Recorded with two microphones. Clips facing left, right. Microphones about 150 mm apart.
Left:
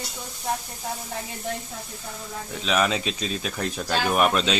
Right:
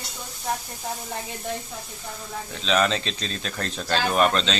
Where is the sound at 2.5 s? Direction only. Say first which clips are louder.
Right 1 dB; 5° left (ahead or behind).